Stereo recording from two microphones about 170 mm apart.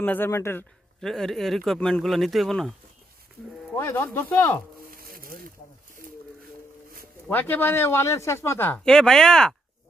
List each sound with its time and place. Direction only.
0.0 s speech: 10° left (ahead or behind)
1.0 s speech: centre (ahead or behind)
3.7 s speech: 15° left (ahead or behind)
4.8 s a sound: 60° right (ahead or behind)
7.2 s speech: 10° left (ahead or behind)